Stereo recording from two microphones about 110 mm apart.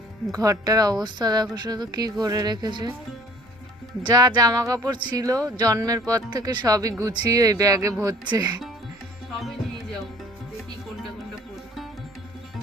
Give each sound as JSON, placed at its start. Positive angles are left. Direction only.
{"t": 0.3, "sound": "speech", "side_deg": -35}
{"t": 4.0, "sound": "speech", "side_deg": -40}
{"t": 8.2, "sound": "speech", "side_deg": -40}